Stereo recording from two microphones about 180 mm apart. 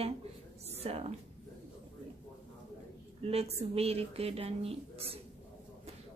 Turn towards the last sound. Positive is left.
turn(degrees=-35)  # may be behind; listen again after turning